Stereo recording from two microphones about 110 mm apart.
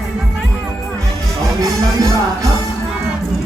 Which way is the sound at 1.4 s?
30° right (ahead or behind).